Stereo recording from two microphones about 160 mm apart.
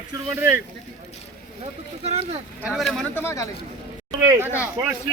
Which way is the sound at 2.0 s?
40° right (ahead or behind).